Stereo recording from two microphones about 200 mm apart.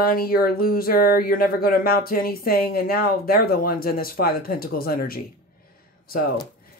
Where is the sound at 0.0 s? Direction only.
50° left (ahead or behind).